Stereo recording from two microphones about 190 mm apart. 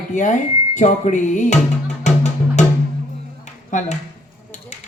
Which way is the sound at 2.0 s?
40° left (ahead or behind).